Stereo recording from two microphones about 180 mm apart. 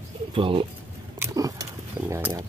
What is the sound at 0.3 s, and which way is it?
Speech, 30° right (ahead or behind).